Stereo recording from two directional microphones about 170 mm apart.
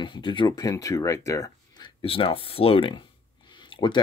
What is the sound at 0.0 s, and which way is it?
Speech, 30° left (ahead or behind).